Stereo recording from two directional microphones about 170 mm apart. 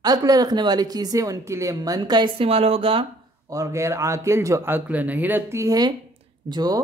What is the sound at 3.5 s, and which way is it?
A woman's voice, 20° right (ahead or behind).